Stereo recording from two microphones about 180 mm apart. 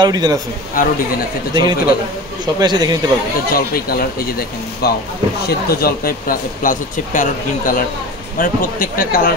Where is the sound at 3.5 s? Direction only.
55° left (ahead or behind).